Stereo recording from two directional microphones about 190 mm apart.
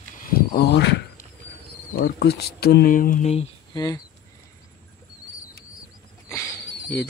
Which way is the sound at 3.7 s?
20° left (ahead or behind).